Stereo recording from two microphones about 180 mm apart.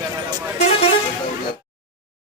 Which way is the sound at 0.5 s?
35° left (ahead or behind).